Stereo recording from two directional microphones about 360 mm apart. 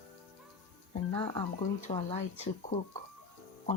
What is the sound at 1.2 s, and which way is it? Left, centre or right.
Speech, centre.